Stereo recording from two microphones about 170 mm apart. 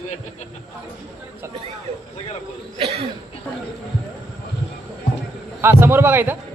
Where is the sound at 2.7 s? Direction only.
30° right (ahead or behind).